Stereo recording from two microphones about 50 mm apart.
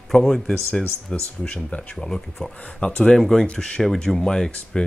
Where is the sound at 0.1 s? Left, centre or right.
Centre; by 2.0 s left.